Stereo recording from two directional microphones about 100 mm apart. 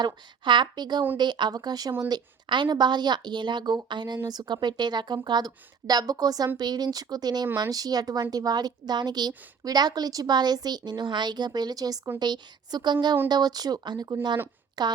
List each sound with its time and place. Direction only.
0.0 s a woman's voice: 50° right (ahead or behind)